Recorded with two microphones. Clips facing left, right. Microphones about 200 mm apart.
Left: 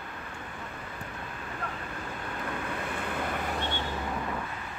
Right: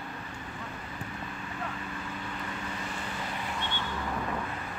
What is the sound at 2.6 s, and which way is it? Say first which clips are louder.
Vehicle: left 3 dB; 55° left (ahead or behind).